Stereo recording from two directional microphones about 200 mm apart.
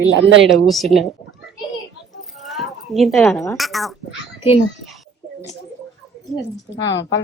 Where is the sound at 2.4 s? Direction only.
Centre (ahead or behind).